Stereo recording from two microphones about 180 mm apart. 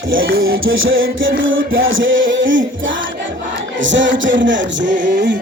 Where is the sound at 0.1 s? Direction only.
90° right.